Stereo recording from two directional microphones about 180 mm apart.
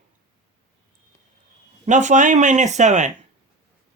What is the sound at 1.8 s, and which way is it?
Speech, 40° right (ahead or behind).